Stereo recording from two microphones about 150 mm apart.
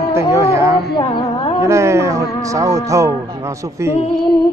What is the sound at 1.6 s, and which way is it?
Music, 20° right (ahead or behind).